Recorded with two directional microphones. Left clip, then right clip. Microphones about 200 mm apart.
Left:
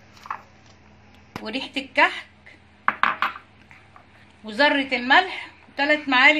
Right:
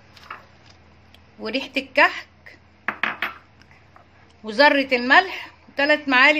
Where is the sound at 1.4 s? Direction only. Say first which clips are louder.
Right 4 dB; 40° right (ahead or behind).